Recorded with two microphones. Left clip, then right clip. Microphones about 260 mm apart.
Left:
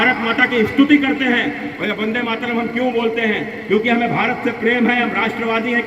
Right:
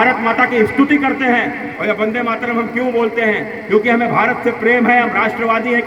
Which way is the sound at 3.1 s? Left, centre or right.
Right.